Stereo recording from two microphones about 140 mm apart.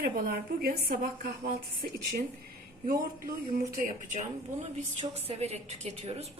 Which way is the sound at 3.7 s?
70° right (ahead or behind).